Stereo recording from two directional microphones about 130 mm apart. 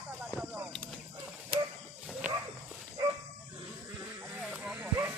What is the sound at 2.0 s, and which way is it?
Dog, 5° right (ahead or behind).